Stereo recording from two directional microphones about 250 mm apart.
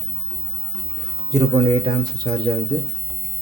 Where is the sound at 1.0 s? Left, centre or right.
Centre.